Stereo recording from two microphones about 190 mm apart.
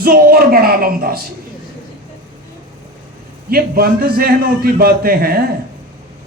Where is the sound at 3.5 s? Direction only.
50° right (ahead or behind).